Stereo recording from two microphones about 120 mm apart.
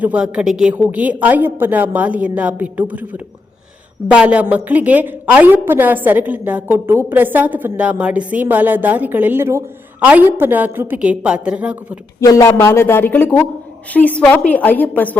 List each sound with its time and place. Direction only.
0.0 s a woman's voice: 10° right (ahead or behind)
12.2 s a woman's voice: 30° left (ahead or behind)